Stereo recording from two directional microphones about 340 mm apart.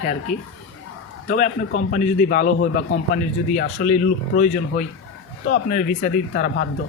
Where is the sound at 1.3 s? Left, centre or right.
Left.